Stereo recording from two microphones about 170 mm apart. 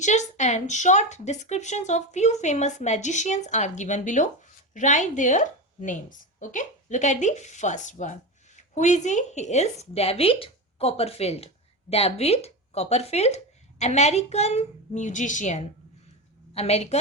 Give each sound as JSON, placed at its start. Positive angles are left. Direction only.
{"t": 0.0, "sound": "speech", "side_deg": 45}